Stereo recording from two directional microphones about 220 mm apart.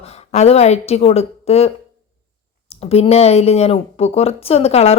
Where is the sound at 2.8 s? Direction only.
25° left (ahead or behind).